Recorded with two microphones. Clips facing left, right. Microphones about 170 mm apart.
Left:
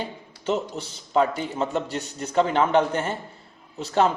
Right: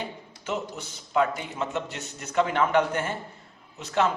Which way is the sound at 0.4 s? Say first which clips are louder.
Left 6 dB; 30° left (ahead or behind).